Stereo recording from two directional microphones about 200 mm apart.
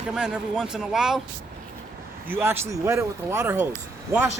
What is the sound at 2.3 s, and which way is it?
Speech, 10° right (ahead or behind).